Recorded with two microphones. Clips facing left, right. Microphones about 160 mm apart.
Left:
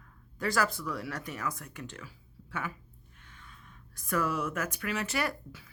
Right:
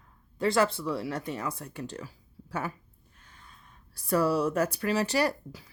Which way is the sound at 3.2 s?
35° right (ahead or behind).